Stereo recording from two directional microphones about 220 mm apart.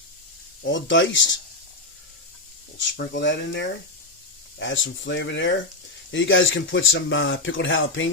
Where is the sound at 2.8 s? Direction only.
55° left (ahead or behind).